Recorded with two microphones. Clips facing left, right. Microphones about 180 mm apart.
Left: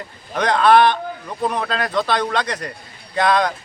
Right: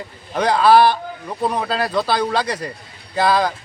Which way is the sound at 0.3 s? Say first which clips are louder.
Right 1 dB; 5° right (ahead or behind).